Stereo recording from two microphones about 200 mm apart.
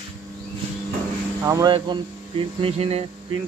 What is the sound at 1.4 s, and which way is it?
Speech, 15° right (ahead or behind).